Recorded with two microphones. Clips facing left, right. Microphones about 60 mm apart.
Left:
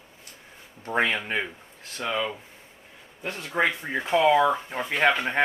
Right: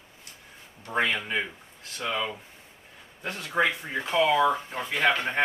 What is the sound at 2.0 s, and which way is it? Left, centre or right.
Speech, centre.